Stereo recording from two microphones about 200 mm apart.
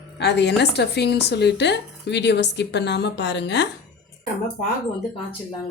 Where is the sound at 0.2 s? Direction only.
55° left (ahead or behind).